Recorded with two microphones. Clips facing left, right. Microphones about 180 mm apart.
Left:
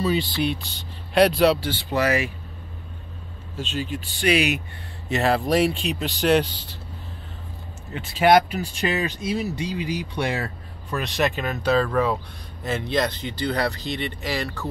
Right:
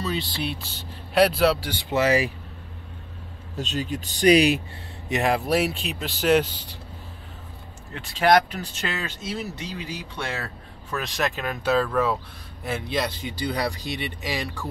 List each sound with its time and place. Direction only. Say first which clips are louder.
0.0 s speech: left 6 dB; 5° left (ahead or behind)
1.7 s speech: right 1 dB; 20° right (ahead or behind)
3.5 s speech: even; 40° right (ahead or behind)
5.1 s speech: left 2 dB; 15° right (ahead or behind)
7.9 s speech: left 2 dB; 5° left (ahead or behind)
10.9 s speech: left 3 dB; centre (ahead or behind); by 14.7 s 15° right (ahead or behind)